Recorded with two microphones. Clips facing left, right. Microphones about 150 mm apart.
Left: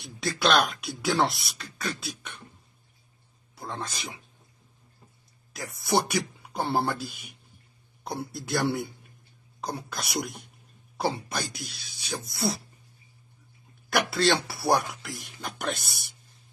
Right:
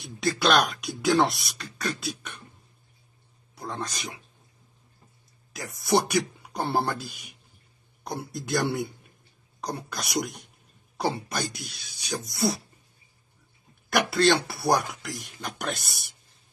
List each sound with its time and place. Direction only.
0.2 s speech: centre (ahead or behind)
3.5 s speech: centre (ahead or behind)
5.5 s speech: centre (ahead or behind)
13.8 s speech: centre (ahead or behind)